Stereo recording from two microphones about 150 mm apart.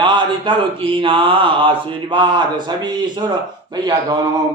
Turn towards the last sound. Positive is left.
turn(degrees=-25)  # may be behind; listen again after turning